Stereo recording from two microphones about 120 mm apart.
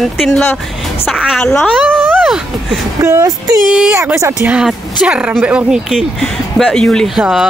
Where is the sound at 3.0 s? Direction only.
25° right (ahead or behind).